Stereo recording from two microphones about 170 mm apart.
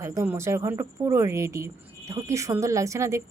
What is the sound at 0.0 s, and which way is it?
A woman's voice, 15° right (ahead or behind).